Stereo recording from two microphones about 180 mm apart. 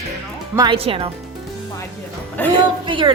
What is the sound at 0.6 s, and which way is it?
Speech, 30° right (ahead or behind).